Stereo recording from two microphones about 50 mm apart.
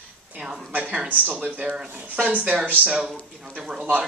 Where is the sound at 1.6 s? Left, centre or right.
Centre.